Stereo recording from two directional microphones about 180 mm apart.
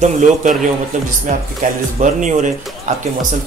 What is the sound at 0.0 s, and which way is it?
Speech, 45° right (ahead or behind).